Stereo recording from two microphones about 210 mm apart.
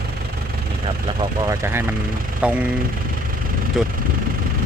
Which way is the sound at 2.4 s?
5° right (ahead or behind).